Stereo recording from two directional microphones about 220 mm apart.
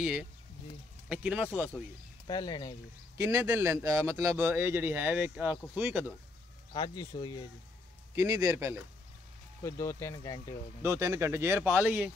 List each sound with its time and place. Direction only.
0.0 s speech: 5° right (ahead or behind)
2.2 s speech: 20° left (ahead or behind)
3.2 s speech: 15° right (ahead or behind)
6.7 s speech: 20° left (ahead or behind)
8.2 s speech: 15° right (ahead or behind)
9.6 s speech: 15° left (ahead or behind)
10.8 s speech: 10° right (ahead or behind)